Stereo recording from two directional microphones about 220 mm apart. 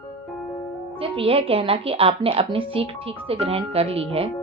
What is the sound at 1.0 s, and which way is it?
A woman's voice, 25° right (ahead or behind).